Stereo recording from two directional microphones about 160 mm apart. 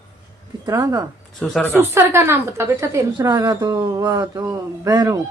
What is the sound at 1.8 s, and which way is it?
A woman's voice, 15° right (ahead or behind).